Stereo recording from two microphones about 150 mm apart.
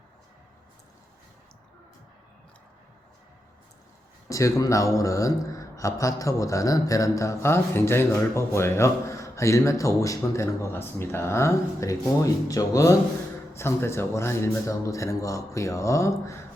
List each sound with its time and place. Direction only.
4.3 s speech: 20° left (ahead or behind)